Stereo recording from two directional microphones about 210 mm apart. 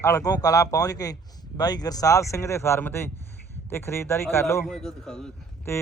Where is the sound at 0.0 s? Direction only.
15° left (ahead or behind).